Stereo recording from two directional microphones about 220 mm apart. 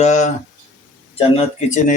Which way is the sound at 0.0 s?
30° left (ahead or behind).